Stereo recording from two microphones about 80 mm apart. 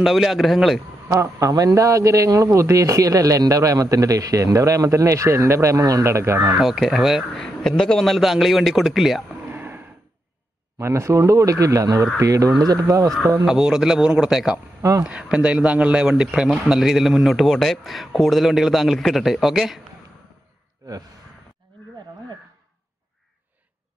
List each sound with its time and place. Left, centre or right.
0.0 s a man's voice: centre
1.0 s a man's voice: right
6.6 s a man's voice: centre
7.3 s a man's voice: centre
9.3 s a sound: right
10.8 s a man's voice: right
13.5 s a man's voice: centre
14.8 s speech: right
15.0 s a man's voice: centre